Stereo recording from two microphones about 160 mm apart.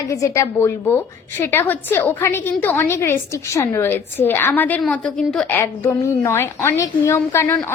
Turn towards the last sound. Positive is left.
turn(degrees=15)  # may be behind; listen again after turning